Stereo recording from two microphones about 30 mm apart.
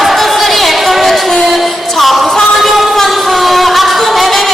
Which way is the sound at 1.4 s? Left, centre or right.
Centre.